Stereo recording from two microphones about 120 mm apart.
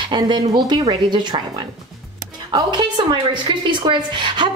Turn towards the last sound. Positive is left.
turn(degrees=-40)  # may be behind; listen again after turning